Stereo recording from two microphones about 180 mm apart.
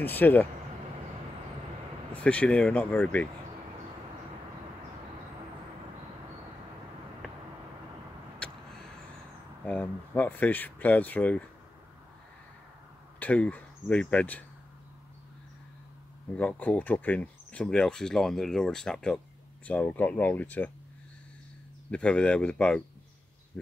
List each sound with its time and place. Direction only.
0.0 s speech: 10° left (ahead or behind)
2.2 s speech: 5° left (ahead or behind)
9.7 s speech: 10° left (ahead or behind)
13.2 s speech: 10° left (ahead or behind)
16.3 s speech: 10° left (ahead or behind)
21.9 s speech: 5° left (ahead or behind)